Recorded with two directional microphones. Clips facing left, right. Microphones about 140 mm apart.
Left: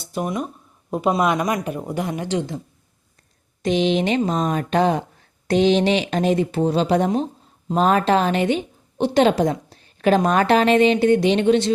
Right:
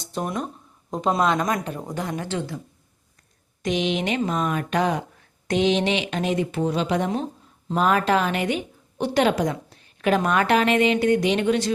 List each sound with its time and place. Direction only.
0.0 s speech: 5° left (ahead or behind)
3.6 s a woman's voice: 30° left (ahead or behind)